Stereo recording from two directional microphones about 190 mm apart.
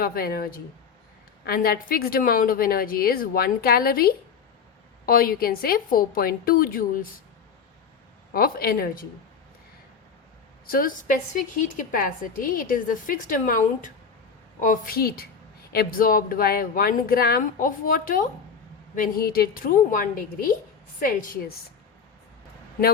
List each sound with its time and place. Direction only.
0.0 s a woman's voice: 50° left (ahead or behind)
8.3 s a woman's voice: 50° left (ahead or behind)
10.7 s a woman's voice: 45° left (ahead or behind)